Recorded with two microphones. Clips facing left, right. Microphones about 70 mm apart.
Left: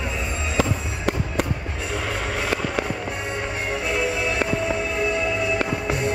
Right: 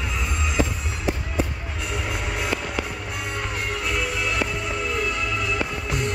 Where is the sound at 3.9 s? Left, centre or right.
Left.